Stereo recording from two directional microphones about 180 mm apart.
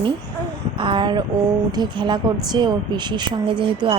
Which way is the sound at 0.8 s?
25° right (ahead or behind).